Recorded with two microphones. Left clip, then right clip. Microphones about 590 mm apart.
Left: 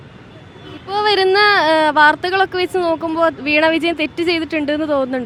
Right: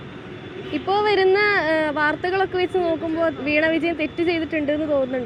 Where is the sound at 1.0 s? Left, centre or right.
Centre.